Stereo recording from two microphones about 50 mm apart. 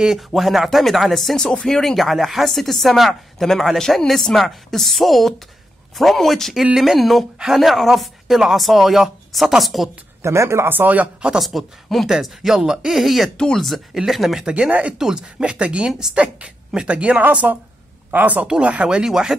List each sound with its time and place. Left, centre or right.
0.3 s speech: centre
10.2 s speech: right
10.7 s speech: right
11.3 s speech: centre
14.4 s speech: centre
15.0 s speech: centre
15.4 s speech: right
15.9 s speech: centre
16.2 s speech: right
18.9 s speech: centre